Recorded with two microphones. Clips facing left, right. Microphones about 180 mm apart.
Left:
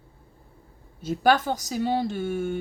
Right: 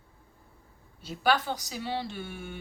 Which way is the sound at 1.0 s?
45° left (ahead or behind).